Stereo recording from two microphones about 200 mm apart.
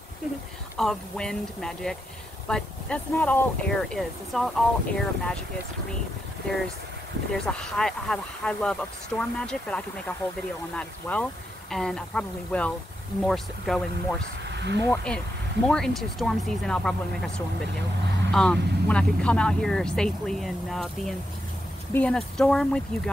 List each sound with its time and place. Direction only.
0.7 s speech: 5° left (ahead or behind)
7.3 s speech: 5° left (ahead or behind)
14.4 s a sound: 60° right (ahead or behind)
14.9 s speech: 5° left (ahead or behind)
18.3 s speech: 5° left (ahead or behind)